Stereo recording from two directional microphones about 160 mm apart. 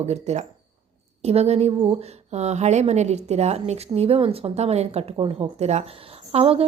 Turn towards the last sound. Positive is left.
turn(degrees=-35)  # may be behind; listen again after turning